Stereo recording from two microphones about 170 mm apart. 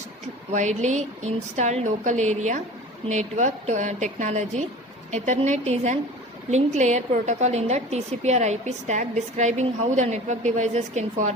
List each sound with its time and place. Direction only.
0.5 s a woman's voice: 45° right (ahead or behind)